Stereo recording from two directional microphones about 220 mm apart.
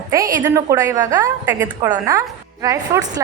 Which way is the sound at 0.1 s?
15° right (ahead or behind).